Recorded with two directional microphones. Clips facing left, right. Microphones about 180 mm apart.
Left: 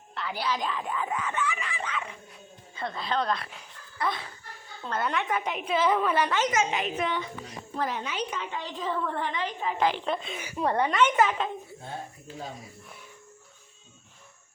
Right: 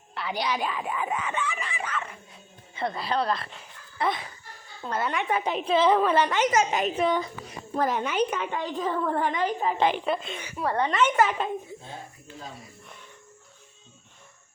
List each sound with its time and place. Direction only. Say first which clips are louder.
0.1 s speech: right 2 dB; 15° right (ahead or behind)
1.9 s speech: right 1 dB; 10° right (ahead or behind)
3.9 s speech: right 3 dB; 25° right (ahead or behind)
4.8 s speech: right 1 dB; 5° right (ahead or behind)
5.3 s a woman's voice: right 4 dB; 30° right (ahead or behind)
6.2 s speech: right 2 dB; 15° right (ahead or behind)
6.5 s a woman's voice: right 3 dB; 40° right (ahead or behind)
7.8 s a woman's voice: right 6 dB; 50° right (ahead or behind)
9.7 s a woman's voice: left 1 dB; 20° right (ahead or behind)
10.0 s speech: right 2 dB; 5° right (ahead or behind)
10.6 s a woman's voice: left 1 dB; 20° left (ahead or behind)
11.0 s speech: right 1 dB; 5° right (ahead or behind)